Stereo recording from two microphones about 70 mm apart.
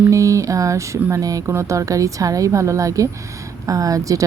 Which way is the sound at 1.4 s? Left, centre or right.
Right.